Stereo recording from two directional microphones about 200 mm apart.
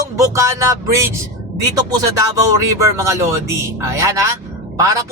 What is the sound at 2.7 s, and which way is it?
Speech, 15° right (ahead or behind).